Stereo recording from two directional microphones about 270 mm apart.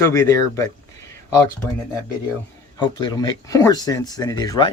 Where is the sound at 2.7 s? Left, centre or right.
Centre.